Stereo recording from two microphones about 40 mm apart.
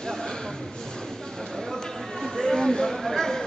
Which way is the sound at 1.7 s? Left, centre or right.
Centre.